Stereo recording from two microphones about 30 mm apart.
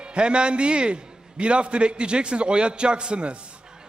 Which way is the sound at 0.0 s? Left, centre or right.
Right.